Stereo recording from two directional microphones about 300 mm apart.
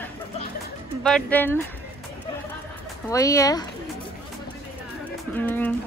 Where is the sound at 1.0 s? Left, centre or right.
Centre.